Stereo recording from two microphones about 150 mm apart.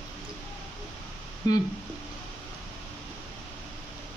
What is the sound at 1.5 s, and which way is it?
Speech, 25° left (ahead or behind).